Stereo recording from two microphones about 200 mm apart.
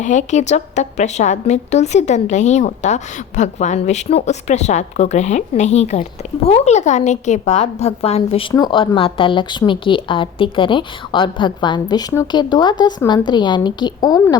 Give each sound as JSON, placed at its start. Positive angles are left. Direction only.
{"t": 0.0, "sound": "a woman's voice", "side_deg": 35}